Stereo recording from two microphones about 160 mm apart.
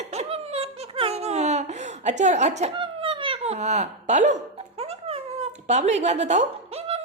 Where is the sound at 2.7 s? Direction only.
30° right (ahead or behind).